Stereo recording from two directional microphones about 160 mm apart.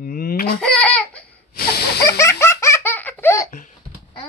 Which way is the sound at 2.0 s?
20° left (ahead or behind).